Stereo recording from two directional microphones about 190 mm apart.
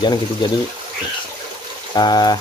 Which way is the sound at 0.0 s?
25° left (ahead or behind).